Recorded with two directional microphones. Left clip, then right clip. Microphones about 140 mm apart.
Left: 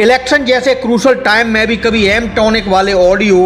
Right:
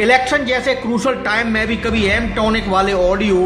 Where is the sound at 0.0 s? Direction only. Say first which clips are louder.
Left 4 dB; 35° left (ahead or behind).